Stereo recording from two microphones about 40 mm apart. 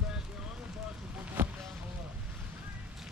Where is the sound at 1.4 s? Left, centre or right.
Right.